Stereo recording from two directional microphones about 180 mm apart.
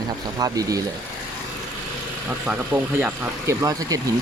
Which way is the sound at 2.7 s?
10° right (ahead or behind).